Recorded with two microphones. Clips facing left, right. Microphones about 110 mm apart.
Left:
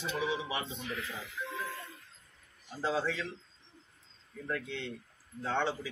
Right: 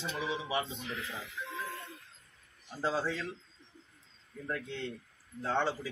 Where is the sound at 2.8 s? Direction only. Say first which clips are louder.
Even; centre (ahead or behind).